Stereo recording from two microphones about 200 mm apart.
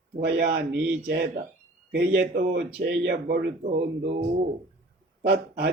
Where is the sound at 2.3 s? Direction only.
50° right (ahead or behind).